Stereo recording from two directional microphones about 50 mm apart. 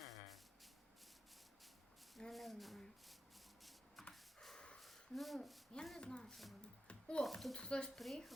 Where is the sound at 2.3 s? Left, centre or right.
Centre.